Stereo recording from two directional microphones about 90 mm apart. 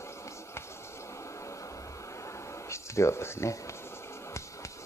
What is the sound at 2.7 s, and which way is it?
Speech, 30° left (ahead or behind).